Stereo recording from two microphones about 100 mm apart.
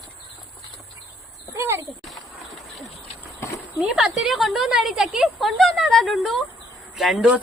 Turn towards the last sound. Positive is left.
turn(degrees=0)  # may be behind; listen again after turning